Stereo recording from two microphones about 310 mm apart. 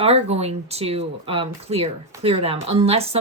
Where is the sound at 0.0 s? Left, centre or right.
Centre.